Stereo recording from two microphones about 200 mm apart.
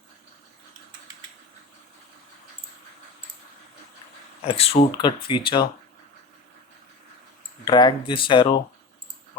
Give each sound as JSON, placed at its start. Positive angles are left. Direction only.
{"t": 4.4, "sound": "speech", "side_deg": 30}
{"t": 7.6, "sound": "speech", "side_deg": 20}